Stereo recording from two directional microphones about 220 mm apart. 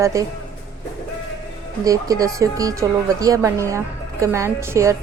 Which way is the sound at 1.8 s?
15° right (ahead or behind).